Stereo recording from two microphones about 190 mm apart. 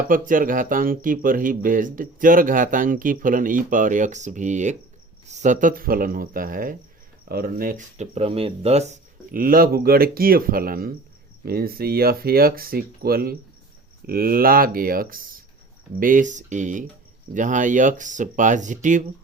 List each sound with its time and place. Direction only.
0.1 s speech: 45° right (ahead or behind)
8.1 s speech: 30° right (ahead or behind)